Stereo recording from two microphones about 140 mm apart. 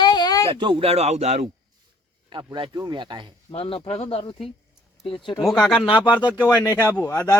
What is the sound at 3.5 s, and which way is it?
Speech, 45° left (ahead or behind).